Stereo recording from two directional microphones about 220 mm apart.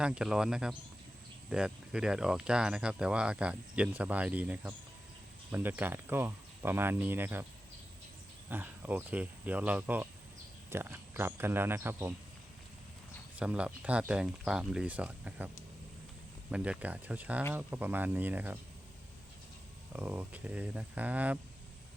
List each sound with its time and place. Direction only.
0.0 s speech: 5° right (ahead or behind)
8.4 s speech: 10° right (ahead or behind)
13.3 s speech: 5° right (ahead or behind)
16.5 s speech: 5° right (ahead or behind)
19.9 s speech: 10° right (ahead or behind)